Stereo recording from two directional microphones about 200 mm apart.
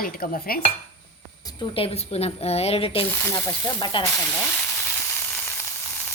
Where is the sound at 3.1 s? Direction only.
10° left (ahead or behind).